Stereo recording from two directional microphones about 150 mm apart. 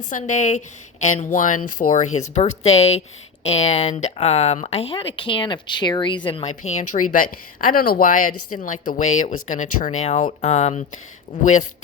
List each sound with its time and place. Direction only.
0.1 s a woman's voice: 55° left (ahead or behind); by 6.5 s 35° left (ahead or behind)
6.5 s a woman's voice: 50° left (ahead or behind)